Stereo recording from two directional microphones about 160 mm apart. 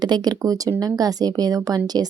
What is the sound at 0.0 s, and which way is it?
Speech, 25° right (ahead or behind).